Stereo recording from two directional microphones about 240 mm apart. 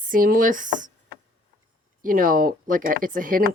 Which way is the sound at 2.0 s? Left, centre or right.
Right.